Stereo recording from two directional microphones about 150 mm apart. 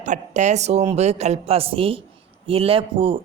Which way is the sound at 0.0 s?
55° right (ahead or behind).